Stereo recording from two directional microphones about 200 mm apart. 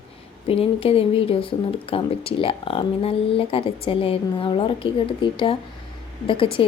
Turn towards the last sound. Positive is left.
turn(degrees=25)  # may be behind; listen again after turning